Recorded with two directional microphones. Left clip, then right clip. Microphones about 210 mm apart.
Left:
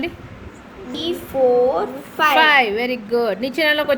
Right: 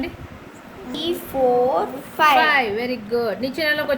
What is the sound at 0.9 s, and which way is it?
A woman's voice, 5° left (ahead or behind).